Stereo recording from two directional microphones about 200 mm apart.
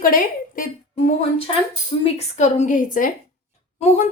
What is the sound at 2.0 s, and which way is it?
A woman's voice, 35° left (ahead or behind).